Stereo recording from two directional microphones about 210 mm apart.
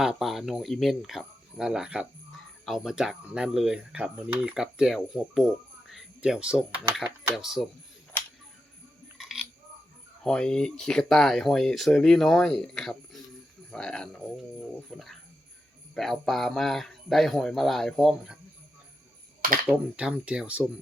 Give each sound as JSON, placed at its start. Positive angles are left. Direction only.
{"t": 0.0, "sound": "speech", "side_deg": 0}
{"t": 9.1, "sound": "a sound", "side_deg": 0}
{"t": 10.2, "sound": "speech", "side_deg": 5}
{"t": 19.6, "sound": "speech", "side_deg": -5}